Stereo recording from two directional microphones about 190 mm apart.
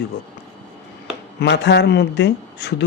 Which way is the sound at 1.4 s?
65° left (ahead or behind).